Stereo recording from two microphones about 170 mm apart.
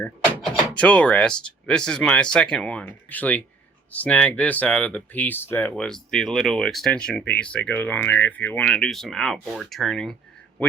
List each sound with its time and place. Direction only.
0.4 s speech: 5° left (ahead or behind)